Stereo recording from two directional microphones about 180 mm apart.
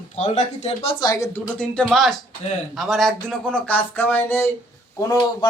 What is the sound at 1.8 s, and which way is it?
Speech, centre (ahead or behind).